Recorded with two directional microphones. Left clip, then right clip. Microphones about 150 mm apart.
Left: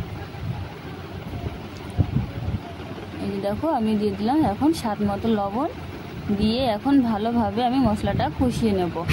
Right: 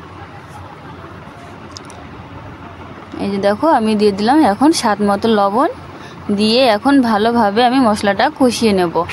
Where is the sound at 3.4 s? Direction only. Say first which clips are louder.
Right 11 dB; 45° right (ahead or behind).